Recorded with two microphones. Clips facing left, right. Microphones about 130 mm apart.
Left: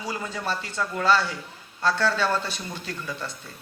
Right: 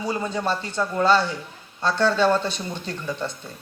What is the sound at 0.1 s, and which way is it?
Speech, 25° right (ahead or behind).